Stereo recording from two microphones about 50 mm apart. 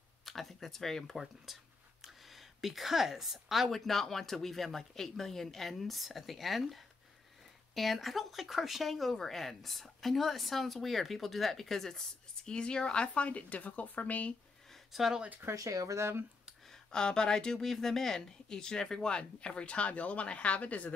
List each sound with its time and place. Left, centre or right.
0.2 s speech: centre; by 14.3 s left
14.9 s speech: centre
15.5 s speech: right
16.9 s speech: centre